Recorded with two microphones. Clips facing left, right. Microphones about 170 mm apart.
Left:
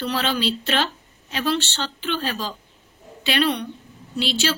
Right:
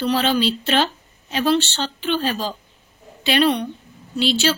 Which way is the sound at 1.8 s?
20° right (ahead or behind).